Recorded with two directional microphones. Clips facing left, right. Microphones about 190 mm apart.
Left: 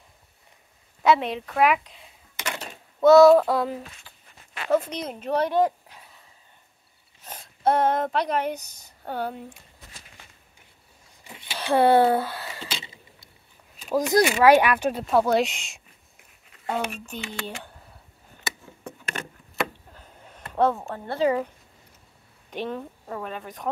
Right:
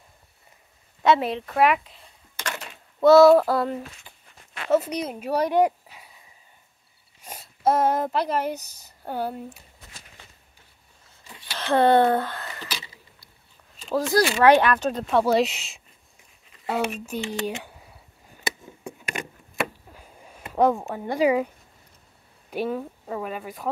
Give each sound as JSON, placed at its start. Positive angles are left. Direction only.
{"t": 1.0, "sound": "speech", "side_deg": 0}
{"t": 2.3, "sound": "a sound", "side_deg": 15}
{"t": 3.0, "sound": "speech", "side_deg": 0}
{"t": 11.2, "sound": "speech", "side_deg": 20}
{"t": 12.4, "sound": "a sound", "side_deg": 20}
{"t": 13.7, "sound": "speech", "side_deg": 10}
{"t": 18.9, "sound": "vehicle", "side_deg": -10}
{"t": 19.9, "sound": "a sound", "side_deg": -10}
{"t": 22.5, "sound": "speech", "side_deg": -5}